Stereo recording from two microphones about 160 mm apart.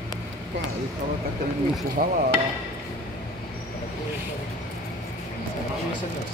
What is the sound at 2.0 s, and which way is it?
Speech, 60° right (ahead or behind).